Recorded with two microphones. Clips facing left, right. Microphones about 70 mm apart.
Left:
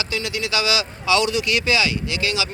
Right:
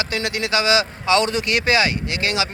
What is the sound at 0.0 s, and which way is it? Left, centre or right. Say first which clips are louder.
Speech: right 2 dB; right.